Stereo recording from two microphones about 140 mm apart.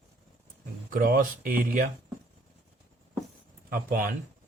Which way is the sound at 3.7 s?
90° right.